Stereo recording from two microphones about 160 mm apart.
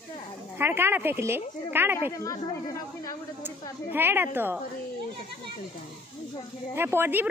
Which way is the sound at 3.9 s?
15° right (ahead or behind).